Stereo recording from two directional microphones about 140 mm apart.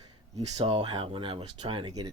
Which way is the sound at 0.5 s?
40° right (ahead or behind).